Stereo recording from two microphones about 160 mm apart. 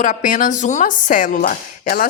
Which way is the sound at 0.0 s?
55° left (ahead or behind).